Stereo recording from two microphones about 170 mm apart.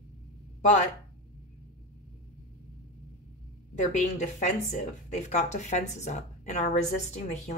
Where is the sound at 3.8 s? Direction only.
45° left (ahead or behind).